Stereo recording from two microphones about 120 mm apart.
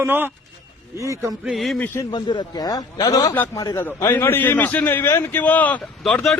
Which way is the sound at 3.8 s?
20° left (ahead or behind).